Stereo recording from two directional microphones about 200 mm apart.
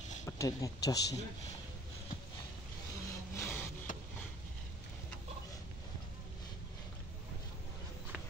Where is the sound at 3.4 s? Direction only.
10° left (ahead or behind).